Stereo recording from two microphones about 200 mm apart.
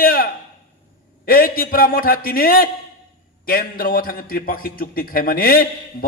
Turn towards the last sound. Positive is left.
turn(degrees=45)  # may be behind; listen again after turning